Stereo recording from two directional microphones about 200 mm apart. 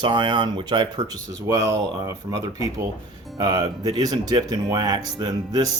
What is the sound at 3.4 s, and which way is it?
Speech, 20° right (ahead or behind).